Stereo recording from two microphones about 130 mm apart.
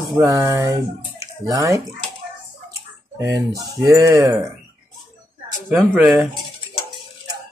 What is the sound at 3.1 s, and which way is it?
Speech, 25° right (ahead or behind).